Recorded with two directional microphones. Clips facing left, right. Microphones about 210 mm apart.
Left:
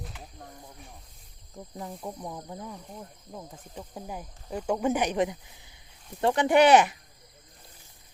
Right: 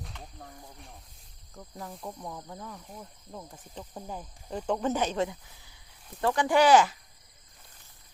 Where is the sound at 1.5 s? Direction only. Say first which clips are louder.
Left 3 dB; 20° left (ahead or behind).